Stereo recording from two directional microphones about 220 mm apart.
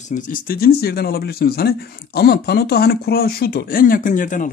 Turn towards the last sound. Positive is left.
turn(degrees=35)  # may be behind; listen again after turning